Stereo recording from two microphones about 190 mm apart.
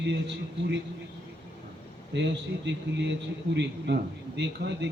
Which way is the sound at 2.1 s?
65° right (ahead or behind).